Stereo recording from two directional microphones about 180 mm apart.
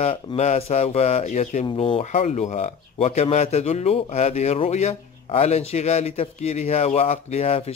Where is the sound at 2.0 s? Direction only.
40° left (ahead or behind).